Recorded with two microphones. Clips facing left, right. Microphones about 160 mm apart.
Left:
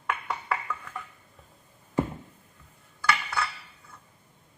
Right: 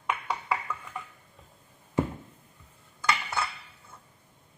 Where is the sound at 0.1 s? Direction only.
15° right (ahead or behind).